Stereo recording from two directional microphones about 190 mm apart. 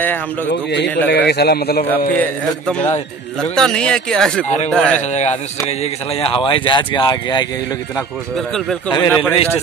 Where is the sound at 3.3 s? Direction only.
5° left (ahead or behind).